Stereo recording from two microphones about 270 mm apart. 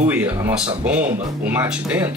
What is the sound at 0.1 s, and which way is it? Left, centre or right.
Speech, centre.